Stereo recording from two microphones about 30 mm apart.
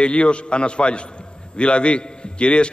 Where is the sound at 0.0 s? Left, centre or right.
Left.